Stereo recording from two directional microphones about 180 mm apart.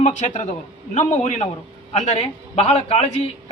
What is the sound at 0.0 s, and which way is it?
A man's voice, 40° left (ahead or behind).